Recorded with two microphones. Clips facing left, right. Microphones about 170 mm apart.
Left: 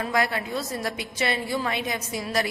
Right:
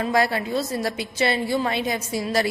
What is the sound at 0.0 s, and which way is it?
A woman's voice, 30° right (ahead or behind).